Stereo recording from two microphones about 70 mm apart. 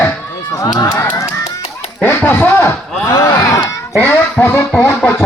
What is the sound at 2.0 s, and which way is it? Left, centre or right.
Speech, left.